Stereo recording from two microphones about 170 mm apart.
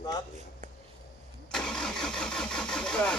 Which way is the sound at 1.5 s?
5° left (ahead or behind).